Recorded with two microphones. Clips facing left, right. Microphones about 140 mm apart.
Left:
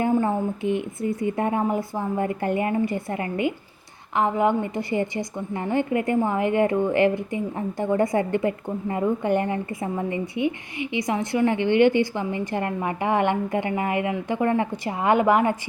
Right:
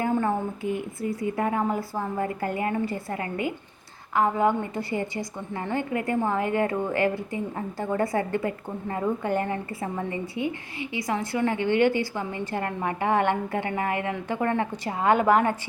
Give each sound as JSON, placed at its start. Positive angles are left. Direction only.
{"t": 0.0, "sound": "a woman's voice", "side_deg": 20}